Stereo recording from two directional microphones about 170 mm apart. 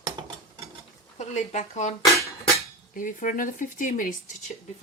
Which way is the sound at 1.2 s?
40° left (ahead or behind).